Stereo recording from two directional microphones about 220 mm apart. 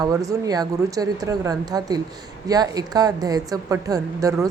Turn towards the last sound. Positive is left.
turn(degrees=-15)  # may be behind; listen again after turning